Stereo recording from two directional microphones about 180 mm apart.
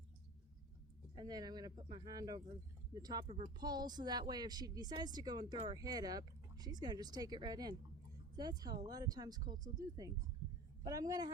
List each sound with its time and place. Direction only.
1.1 s speech: 25° right (ahead or behind)